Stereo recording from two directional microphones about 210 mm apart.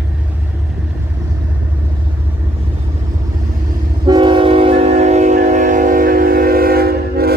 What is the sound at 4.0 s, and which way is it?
Train, 20° right (ahead or behind).